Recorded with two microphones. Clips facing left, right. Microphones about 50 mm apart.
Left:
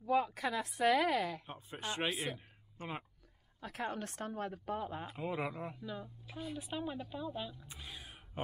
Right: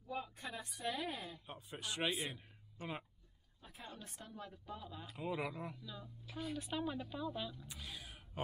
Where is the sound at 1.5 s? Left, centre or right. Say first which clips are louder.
Left 4 dB; left.